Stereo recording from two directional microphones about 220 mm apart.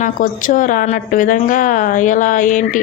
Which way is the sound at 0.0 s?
35° left (ahead or behind).